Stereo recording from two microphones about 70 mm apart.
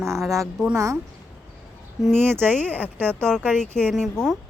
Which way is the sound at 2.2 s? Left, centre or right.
Right.